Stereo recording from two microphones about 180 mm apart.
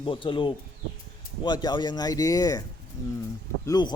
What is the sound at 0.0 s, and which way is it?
Speech, 30° left (ahead or behind).